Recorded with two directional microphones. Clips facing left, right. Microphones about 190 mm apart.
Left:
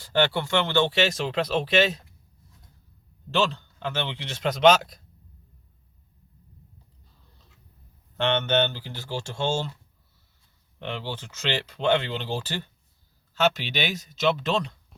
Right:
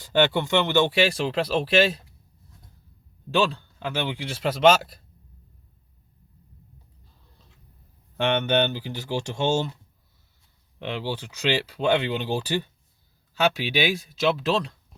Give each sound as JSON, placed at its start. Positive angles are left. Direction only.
{"t": 0.0, "sound": "speech", "side_deg": -15}
{"t": 3.3, "sound": "speech", "side_deg": -10}
{"t": 8.2, "sound": "speech", "side_deg": -10}
{"t": 10.8, "sound": "speech", "side_deg": -15}